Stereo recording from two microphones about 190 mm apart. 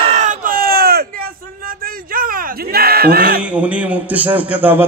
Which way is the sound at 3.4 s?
5° right (ahead or behind).